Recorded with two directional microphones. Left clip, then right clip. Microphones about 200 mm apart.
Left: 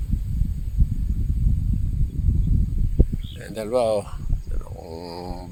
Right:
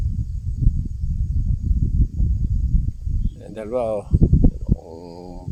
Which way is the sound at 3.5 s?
5° right (ahead or behind).